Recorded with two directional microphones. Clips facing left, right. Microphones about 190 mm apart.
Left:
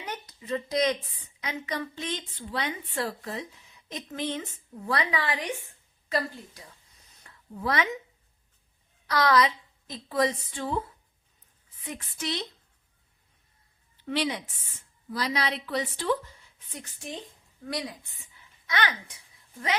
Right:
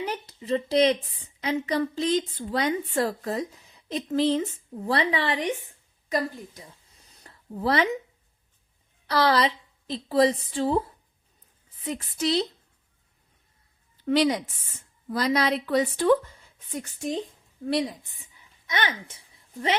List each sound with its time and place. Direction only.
0.0 s a woman's voice: 30° right (ahead or behind)
7.3 s a sound: 35° right (ahead or behind)
9.0 s a woman's voice: 30° right (ahead or behind)
11.9 s a woman's voice: 35° right (ahead or behind)
14.0 s a woman's voice: 40° right (ahead or behind)
17.6 s a woman's voice: 25° right (ahead or behind)